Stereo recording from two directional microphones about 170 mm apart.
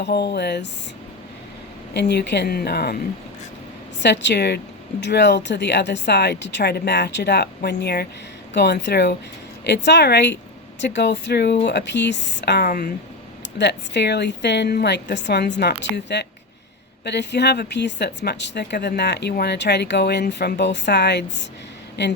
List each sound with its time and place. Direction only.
0.0 s speech: 75° left (ahead or behind)
1.9 s speech: 80° left
4.0 s a woman's voice: 90° left; by 12.9 s 65° left (ahead or behind)
13.6 s a woman's voice: 90° left